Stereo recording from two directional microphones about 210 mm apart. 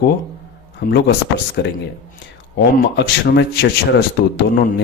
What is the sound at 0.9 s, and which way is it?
Speech, 55° left (ahead or behind).